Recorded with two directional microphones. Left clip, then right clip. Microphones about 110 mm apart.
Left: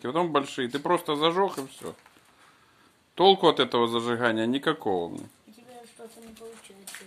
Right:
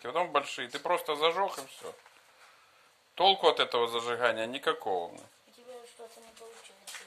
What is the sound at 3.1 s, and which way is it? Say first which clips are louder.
Speech: left 5 dB; 20° left (ahead or behind).